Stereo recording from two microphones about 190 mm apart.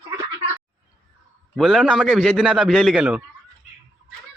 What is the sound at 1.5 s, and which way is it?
Speech, centre (ahead or behind).